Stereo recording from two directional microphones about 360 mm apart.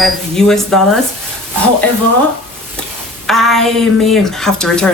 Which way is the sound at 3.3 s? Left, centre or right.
Centre.